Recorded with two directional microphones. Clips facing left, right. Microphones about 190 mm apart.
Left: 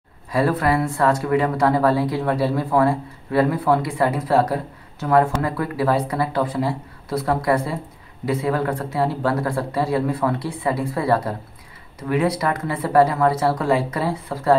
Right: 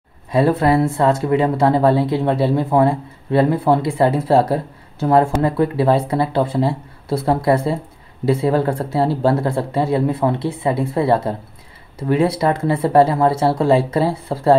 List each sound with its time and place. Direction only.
0.3 s speech: 25° right (ahead or behind)